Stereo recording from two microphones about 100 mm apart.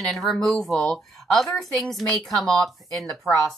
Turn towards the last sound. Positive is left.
turn(degrees=5)  # may be behind; listen again after turning